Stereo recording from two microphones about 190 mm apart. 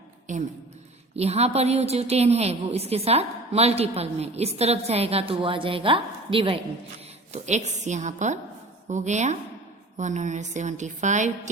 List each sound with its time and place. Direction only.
0.3 s a woman's voice: 40° right (ahead or behind)